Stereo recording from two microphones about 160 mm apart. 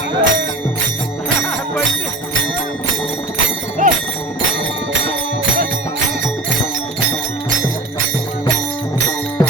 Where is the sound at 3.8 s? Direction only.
55° right (ahead or behind).